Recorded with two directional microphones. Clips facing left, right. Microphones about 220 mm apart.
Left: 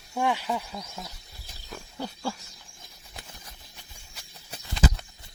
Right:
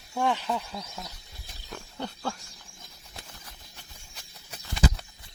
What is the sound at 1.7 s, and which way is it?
Wild animals, 5° left (ahead or behind).